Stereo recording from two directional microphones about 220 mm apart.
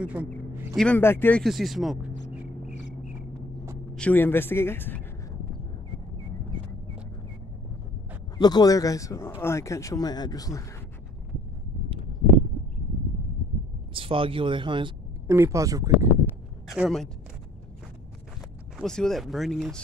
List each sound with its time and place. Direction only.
0.0 s speech: 5° right (ahead or behind)
0.7 s speech: 5° left (ahead or behind)
3.9 s speech: 5° left (ahead or behind)
8.4 s speech: 20° left (ahead or behind)
13.9 s speech: 25° right (ahead or behind)
15.2 s speech: 10° right (ahead or behind)
16.6 s speech: centre (ahead or behind)
18.8 s speech: centre (ahead or behind)